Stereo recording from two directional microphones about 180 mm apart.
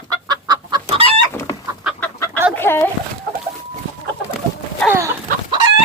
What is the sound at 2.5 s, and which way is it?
Chicken, 10° left (ahead or behind).